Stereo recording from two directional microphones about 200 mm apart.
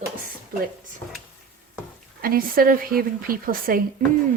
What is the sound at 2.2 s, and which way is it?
A woman's voice, 45° right (ahead or behind).